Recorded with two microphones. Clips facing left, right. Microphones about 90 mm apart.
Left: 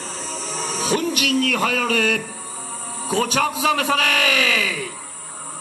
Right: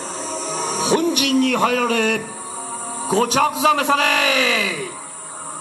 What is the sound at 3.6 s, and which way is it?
A man's voice, 20° right (ahead or behind).